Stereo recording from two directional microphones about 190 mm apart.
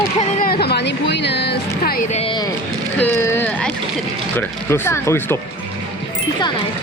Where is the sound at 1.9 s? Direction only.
40° left (ahead or behind).